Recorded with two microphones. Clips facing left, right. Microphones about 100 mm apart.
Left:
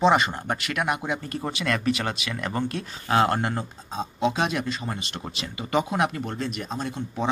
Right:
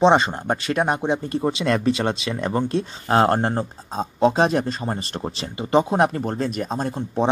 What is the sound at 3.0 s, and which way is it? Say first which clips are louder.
Speech: right 3 dB; 35° right (ahead or behind).